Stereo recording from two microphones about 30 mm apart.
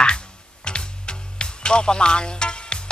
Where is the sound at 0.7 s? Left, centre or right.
Left.